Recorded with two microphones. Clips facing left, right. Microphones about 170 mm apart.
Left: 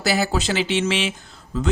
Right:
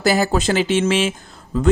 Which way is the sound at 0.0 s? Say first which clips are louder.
Right 4 dB; 50° right (ahead or behind).